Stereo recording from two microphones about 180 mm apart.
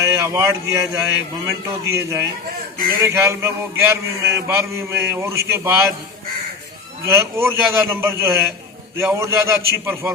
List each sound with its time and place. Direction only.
0.0 s a man's voice: 15° right (ahead or behind)
7.1 s a man's voice: 15° right (ahead or behind)